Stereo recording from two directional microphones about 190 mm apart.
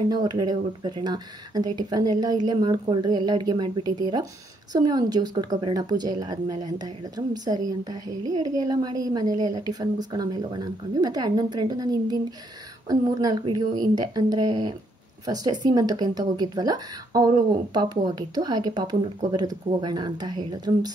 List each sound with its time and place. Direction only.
0.1 s a woman's voice: 20° right (ahead or behind)